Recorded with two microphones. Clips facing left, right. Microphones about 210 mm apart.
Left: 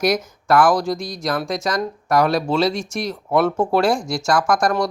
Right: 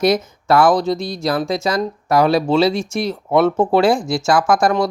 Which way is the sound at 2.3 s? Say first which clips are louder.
Right 4 dB; 5° right (ahead or behind).